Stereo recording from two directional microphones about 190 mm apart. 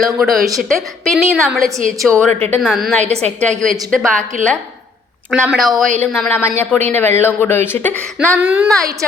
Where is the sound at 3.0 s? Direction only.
35° right (ahead or behind).